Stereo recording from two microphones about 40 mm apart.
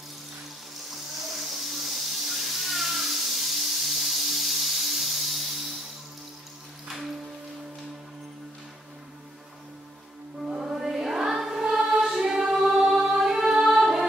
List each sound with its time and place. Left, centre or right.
0.8 s a sound: centre
10.4 s music: centre
10.7 s choir: centre
13.0 s music: centre